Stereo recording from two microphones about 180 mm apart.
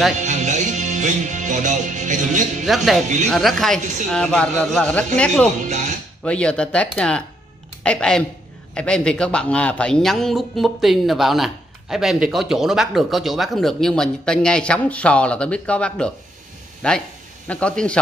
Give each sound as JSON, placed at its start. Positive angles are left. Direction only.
{"t": 0.2, "sound": "music", "side_deg": -40}
{"t": 2.6, "sound": "a man's voice", "side_deg": 0}
{"t": 5.6, "sound": "speech", "side_deg": -45}
{"t": 6.2, "sound": "a man's voice", "side_deg": 5}